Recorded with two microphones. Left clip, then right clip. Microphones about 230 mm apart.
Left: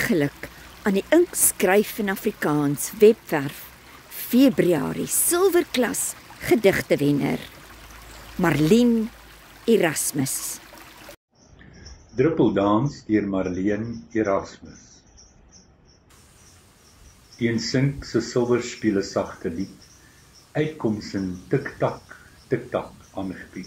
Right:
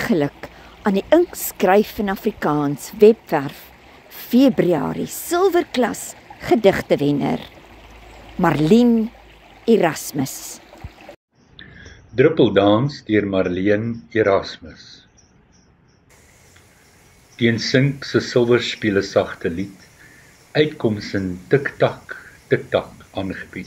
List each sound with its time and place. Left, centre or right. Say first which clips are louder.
0.0 s speech: right 3 dB; centre
12.2 s speech: right 6 dB; right
17.4 s speech: right 6 dB; right
20.5 s speech: right 7 dB; right